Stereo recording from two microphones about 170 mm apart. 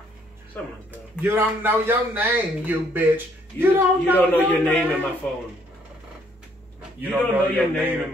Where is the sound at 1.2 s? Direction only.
15° right (ahead or behind).